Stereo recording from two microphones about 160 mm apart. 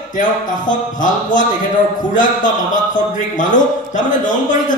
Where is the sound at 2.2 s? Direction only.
55° left (ahead or behind).